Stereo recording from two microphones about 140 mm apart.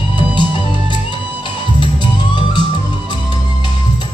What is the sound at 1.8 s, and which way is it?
Music, 30° left (ahead or behind).